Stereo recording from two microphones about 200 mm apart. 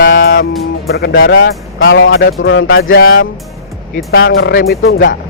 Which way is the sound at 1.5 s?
60° left (ahead or behind).